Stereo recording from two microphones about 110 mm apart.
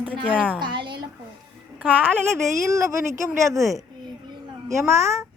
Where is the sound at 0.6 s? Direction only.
45° right (ahead or behind).